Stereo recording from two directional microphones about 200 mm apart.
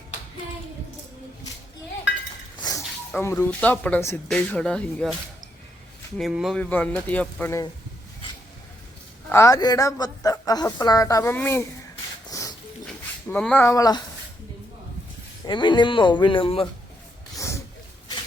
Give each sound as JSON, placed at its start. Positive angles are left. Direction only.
{"t": 2.6, "sound": "chink", "side_deg": 20}
{"t": 3.2, "sound": "a woman's voice", "side_deg": 10}
{"t": 6.1, "sound": "a woman's voice", "side_deg": 0}
{"t": 9.3, "sound": "a woman's voice", "side_deg": 15}
{"t": 12.3, "sound": "pig", "side_deg": 15}
{"t": 13.2, "sound": "a woman's voice", "side_deg": 5}
{"t": 15.4, "sound": "speech", "side_deg": 25}